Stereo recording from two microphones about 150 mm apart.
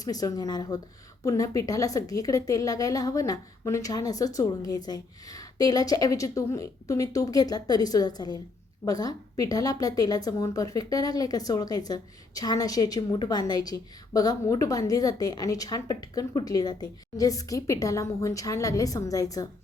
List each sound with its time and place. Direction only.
0.0 s a woman's voice: 25° left (ahead or behind)